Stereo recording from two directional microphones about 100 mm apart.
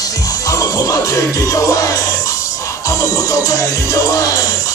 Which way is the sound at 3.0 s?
35° left (ahead or behind).